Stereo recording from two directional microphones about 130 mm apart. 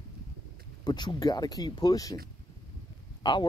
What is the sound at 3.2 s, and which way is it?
Speech, 35° left (ahead or behind).